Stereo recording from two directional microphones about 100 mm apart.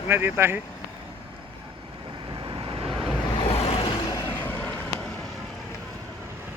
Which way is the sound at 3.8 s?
50° left (ahead or behind).